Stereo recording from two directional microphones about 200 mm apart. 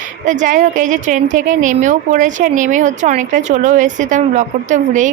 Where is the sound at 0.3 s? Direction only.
40° right (ahead or behind).